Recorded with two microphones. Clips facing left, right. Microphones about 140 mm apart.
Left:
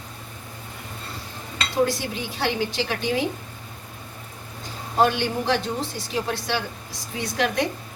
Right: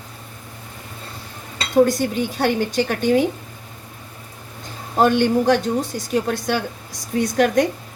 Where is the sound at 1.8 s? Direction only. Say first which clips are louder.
Right 6 dB; 45° right (ahead or behind).